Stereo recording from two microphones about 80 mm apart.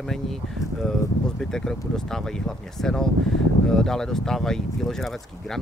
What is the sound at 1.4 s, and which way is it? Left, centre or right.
Speech, centre.